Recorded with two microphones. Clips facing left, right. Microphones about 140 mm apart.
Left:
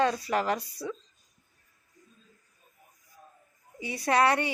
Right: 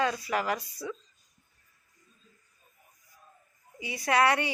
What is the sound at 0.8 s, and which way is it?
Speech, 30° left (ahead or behind).